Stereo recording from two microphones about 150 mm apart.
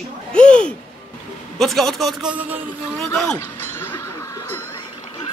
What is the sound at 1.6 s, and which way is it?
Speech, centre (ahead or behind).